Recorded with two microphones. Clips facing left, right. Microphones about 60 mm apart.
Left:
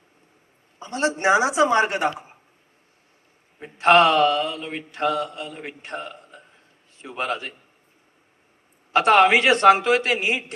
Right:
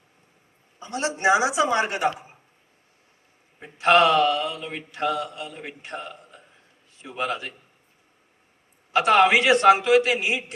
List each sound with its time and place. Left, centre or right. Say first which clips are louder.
0.8 s mantra: left 2 dB; left
3.6 s mantra: left 2 dB; left
9.0 s mantra: left 2 dB; left